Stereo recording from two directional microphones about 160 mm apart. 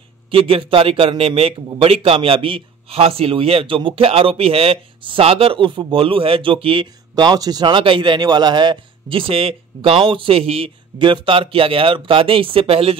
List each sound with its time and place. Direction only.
0.3 s a man's voice: 35° right (ahead or behind)